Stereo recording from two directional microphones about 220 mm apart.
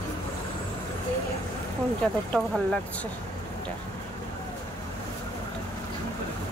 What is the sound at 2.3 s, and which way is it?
Speech, centre (ahead or behind).